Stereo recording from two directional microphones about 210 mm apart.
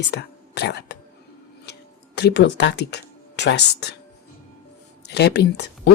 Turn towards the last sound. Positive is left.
turn(degrees=50)  # may be behind; listen again after turning